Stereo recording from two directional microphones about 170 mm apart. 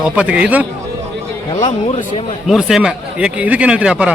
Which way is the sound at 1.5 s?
45° left (ahead or behind).